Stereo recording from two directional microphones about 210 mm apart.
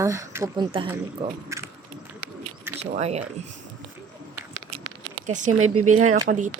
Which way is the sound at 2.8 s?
30° right (ahead or behind).